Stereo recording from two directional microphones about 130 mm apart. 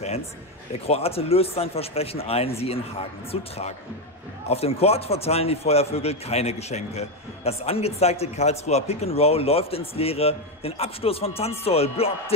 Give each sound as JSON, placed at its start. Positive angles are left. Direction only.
{"t": 0.8, "sound": "a man's voice", "side_deg": 50}